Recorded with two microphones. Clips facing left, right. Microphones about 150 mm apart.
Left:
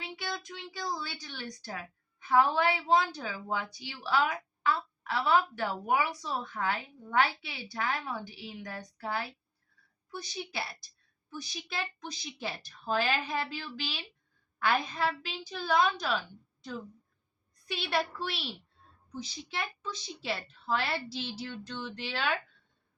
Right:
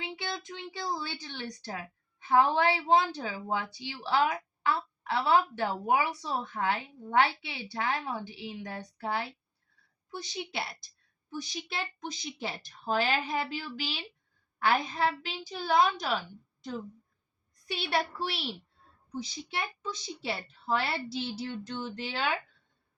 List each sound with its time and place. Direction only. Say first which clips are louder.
0.0 s a woman's voice: right 1 dB; 25° right (ahead or behind)
17.9 s a woman's voice: right 1 dB; 15° right (ahead or behind)